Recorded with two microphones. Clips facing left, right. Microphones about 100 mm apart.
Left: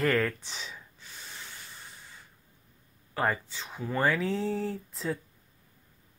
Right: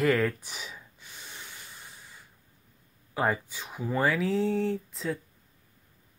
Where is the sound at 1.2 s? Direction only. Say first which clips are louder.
Even; 10° right (ahead or behind).